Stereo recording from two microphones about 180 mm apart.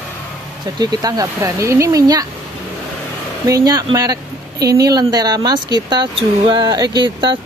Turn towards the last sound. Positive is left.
turn(degrees=-25)  # may be behind; listen again after turning